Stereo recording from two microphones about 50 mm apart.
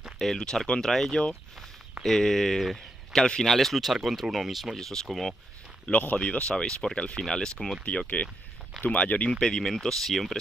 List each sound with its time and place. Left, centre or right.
0.2 s speech: centre
5.9 s speech: left
6.5 s speech: centre
7.8 s speech: left
9.3 s speech: centre